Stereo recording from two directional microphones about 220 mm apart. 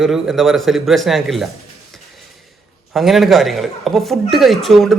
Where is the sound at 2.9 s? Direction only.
Centre (ahead or behind).